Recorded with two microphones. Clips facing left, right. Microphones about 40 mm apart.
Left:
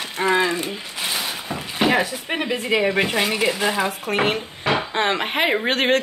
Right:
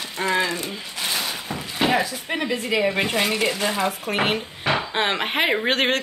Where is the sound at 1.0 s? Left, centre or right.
Centre.